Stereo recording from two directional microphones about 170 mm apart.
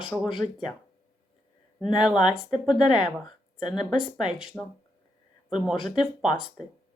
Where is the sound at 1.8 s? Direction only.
5° right (ahead or behind).